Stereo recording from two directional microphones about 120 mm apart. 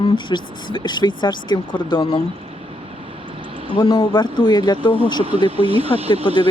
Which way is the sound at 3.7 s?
40° left (ahead or behind).